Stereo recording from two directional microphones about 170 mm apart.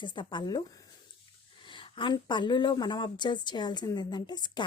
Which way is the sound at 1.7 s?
30° left (ahead or behind).